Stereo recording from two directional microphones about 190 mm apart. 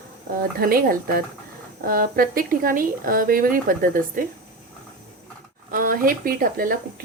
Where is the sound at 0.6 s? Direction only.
50° right (ahead or behind).